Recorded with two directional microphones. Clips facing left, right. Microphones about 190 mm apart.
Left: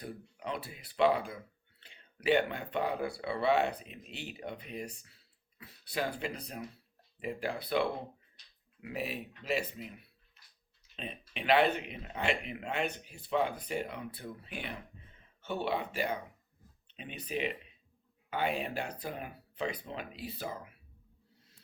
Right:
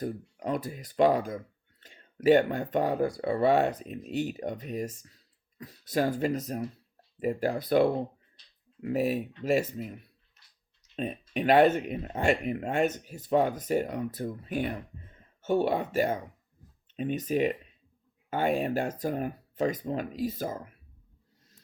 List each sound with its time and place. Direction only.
0.0 s speech: 45° right (ahead or behind)